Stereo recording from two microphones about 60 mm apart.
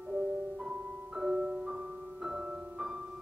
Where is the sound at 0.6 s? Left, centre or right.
Centre.